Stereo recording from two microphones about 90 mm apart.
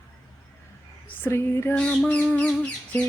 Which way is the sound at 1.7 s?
10° left (ahead or behind).